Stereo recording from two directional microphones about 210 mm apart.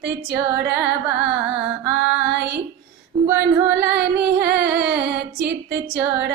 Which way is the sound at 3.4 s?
55° right (ahead or behind).